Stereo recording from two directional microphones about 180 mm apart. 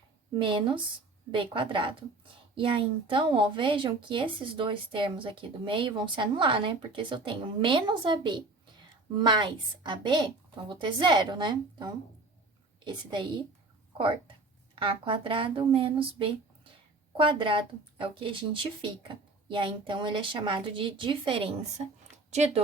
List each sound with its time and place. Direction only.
0.3 s a woman's voice: 30° right (ahead or behind)
14.8 s speech: 30° right (ahead or behind)